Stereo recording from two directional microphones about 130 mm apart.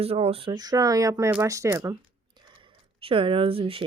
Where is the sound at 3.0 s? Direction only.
45° right (ahead or behind).